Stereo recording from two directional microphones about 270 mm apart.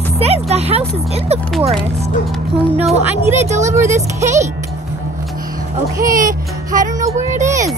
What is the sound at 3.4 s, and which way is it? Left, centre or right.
Speech, right.